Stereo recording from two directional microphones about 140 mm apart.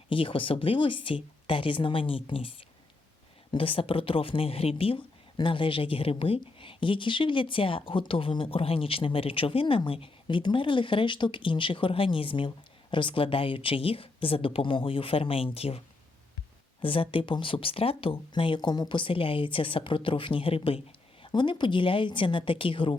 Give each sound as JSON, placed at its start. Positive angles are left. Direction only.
{"t": 0.1, "sound": "speech", "side_deg": 40}
{"t": 16.8, "sound": "speech", "side_deg": 40}